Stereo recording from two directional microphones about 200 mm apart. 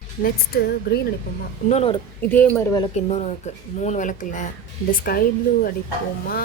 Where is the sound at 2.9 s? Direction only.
35° left (ahead or behind).